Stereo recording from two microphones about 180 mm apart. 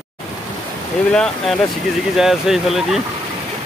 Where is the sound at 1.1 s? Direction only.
5° left (ahead or behind).